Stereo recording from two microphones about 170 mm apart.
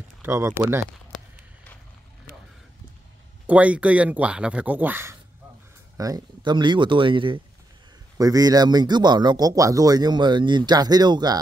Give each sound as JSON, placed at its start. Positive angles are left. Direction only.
{"t": 0.2, "sound": "speech", "side_deg": -15}
{"t": 1.1, "sound": "a sound", "side_deg": 10}
{"t": 3.4, "sound": "speech", "side_deg": -10}